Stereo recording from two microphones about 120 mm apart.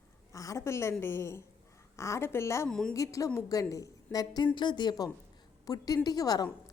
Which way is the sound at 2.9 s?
30° left (ahead or behind).